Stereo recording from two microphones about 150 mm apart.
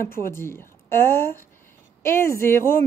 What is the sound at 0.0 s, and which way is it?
A woman's voice, 15° left (ahead or behind).